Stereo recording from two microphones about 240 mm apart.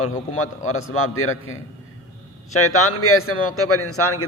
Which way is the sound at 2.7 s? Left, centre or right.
Left.